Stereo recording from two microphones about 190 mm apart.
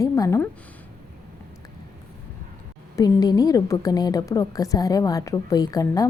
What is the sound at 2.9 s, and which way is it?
A woman's voice, 20° left (ahead or behind).